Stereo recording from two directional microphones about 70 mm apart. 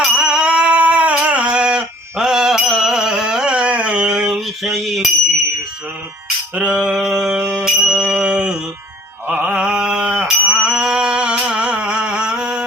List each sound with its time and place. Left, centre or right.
0.0 s a sound: centre
4.3 s cutlery: centre
6.5 s a sound: centre
9.2 s mantra: right
9.5 s mantra: centre
10.2 s music: centre